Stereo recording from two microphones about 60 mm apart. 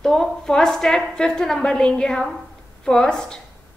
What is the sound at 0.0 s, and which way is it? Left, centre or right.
A woman's voice, centre.